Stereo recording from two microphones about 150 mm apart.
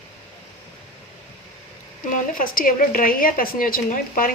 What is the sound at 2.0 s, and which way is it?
A woman's voice, 65° left (ahead or behind).